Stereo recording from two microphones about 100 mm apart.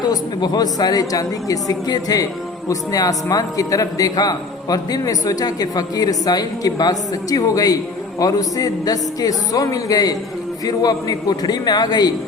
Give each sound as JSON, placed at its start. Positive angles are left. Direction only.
{"t": 0.0, "sound": "a man's voice", "side_deg": 45}